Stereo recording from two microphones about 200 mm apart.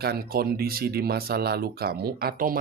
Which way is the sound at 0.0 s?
50° right (ahead or behind).